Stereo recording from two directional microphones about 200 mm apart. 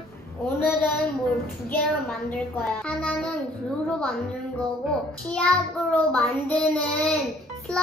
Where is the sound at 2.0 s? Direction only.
5° left (ahead or behind).